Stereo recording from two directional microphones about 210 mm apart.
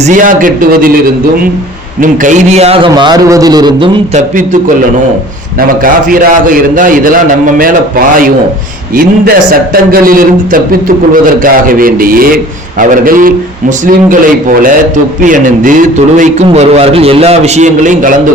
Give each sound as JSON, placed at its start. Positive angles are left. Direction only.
{"t": 0.0, "sound": "a man's voice", "side_deg": -40}
{"t": 2.0, "sound": "a man's voice", "side_deg": -35}
{"t": 5.5, "sound": "a man's voice", "side_deg": -40}
{"t": 15.2, "sound": "a man's voice", "side_deg": -40}